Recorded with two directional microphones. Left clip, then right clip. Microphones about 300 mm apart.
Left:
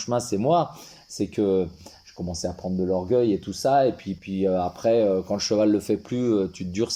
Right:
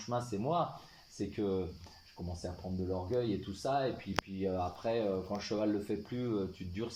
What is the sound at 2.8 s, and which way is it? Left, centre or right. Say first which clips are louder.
Speech: left 13 dB; left.